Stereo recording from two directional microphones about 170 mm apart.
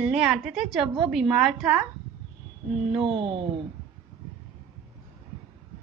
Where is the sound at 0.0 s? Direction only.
5° right (ahead or behind).